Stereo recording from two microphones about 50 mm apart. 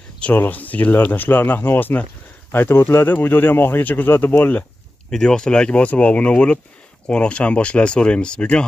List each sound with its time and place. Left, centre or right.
0.3 s speech: left
5.1 s speech: centre